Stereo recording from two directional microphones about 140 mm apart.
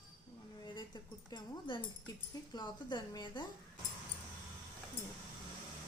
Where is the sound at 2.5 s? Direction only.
30° left (ahead or behind).